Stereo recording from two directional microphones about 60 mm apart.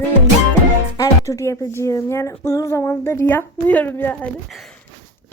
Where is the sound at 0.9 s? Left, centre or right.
Left.